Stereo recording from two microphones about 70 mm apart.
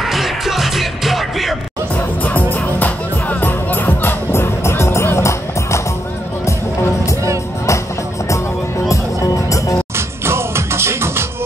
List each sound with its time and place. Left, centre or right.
0.0 s music: centre
2.2 s music: left
8.8 s music: left
9.9 s music: right